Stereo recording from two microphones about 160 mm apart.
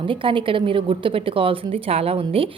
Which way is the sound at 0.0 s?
30° right (ahead or behind).